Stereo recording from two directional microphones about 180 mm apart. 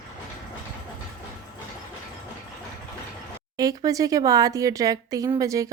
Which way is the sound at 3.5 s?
20° right (ahead or behind).